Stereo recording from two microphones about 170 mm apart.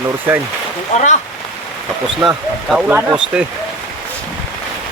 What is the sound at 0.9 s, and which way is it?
Speech, 40° left (ahead or behind).